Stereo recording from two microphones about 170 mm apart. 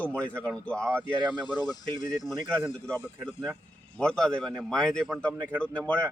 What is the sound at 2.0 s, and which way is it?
Speech, 45° left (ahead or behind).